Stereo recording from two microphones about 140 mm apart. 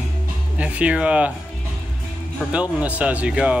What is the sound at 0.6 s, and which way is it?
Speech, 10° right (ahead or behind).